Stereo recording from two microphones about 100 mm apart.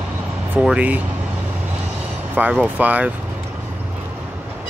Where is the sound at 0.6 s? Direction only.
15° right (ahead or behind).